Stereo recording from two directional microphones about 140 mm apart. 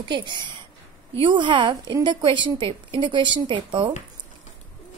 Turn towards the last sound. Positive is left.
turn(degrees=-35)  # may be behind; listen again after turning